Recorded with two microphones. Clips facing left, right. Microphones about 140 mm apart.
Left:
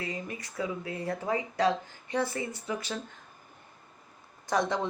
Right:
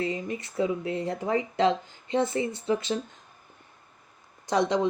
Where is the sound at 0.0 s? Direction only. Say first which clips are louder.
Right 7 dB; 25° right (ahead or behind).